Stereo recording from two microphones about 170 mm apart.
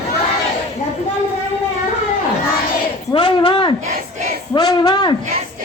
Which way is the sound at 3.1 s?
30° left (ahead or behind).